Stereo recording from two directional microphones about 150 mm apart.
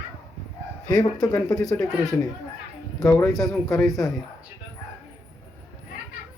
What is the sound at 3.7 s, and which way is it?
Speech, centre (ahead or behind).